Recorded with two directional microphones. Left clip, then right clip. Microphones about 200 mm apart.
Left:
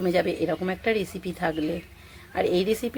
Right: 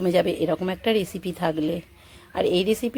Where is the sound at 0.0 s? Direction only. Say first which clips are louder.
Right 3 dB; 30° right (ahead or behind).